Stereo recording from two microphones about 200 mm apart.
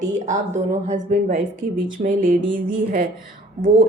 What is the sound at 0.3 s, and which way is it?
Speech, 35° right (ahead or behind).